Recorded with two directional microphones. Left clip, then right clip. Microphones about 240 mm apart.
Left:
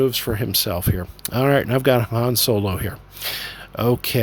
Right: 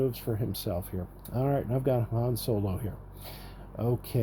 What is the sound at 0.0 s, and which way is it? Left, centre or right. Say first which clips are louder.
Speech: left 11 dB; left.